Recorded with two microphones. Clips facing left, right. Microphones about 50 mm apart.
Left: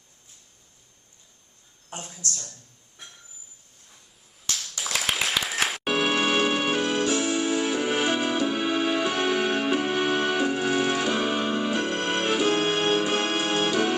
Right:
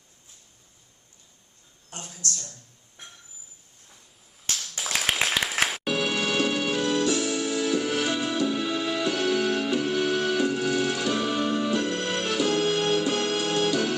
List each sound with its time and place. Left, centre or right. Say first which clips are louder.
1.9 s speech: even; left
4.4 s music: even; centre
6.1 s music: left 2 dB; left